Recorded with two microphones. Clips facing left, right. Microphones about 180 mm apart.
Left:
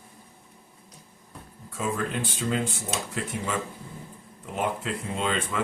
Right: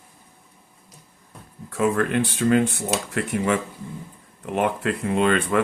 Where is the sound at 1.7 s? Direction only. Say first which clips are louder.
Right 8 dB; 65° right (ahead or behind).